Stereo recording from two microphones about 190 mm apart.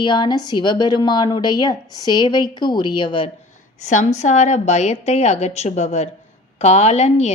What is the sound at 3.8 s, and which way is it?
A woman's voice, 40° left (ahead or behind).